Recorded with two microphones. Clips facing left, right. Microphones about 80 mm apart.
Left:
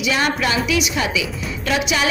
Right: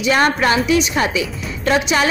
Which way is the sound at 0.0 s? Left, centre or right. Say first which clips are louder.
Right 4 dB; right.